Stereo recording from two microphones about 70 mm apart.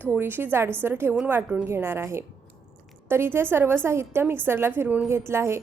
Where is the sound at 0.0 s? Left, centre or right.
Right.